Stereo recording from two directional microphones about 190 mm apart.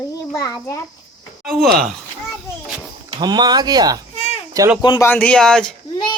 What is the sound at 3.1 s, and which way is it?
Speech, 20° right (ahead or behind).